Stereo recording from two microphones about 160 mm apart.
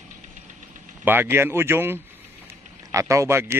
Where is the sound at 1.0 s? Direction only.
15° right (ahead or behind).